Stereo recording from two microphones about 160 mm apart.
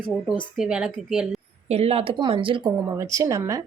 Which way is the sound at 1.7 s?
40° right (ahead or behind).